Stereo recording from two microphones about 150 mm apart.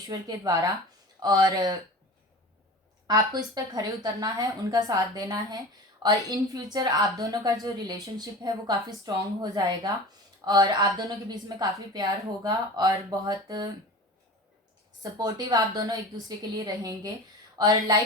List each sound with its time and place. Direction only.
0.1 s a woman's voice: 25° right (ahead or behind)
3.1 s a woman's voice: 25° right (ahead or behind)
15.2 s a woman's voice: 25° right (ahead or behind)